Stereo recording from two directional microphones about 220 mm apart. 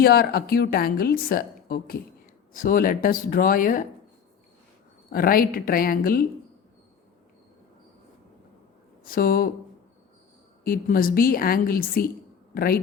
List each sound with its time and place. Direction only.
0.0 s a woman's voice: 45° left (ahead or behind)
5.1 s speech: 40° left (ahead or behind)
9.0 s speech: 40° left (ahead or behind)
10.6 s a woman's voice: 40° left (ahead or behind)